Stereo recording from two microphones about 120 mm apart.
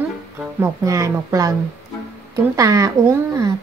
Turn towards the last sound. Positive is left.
turn(degrees=-30)  # may be behind; listen again after turning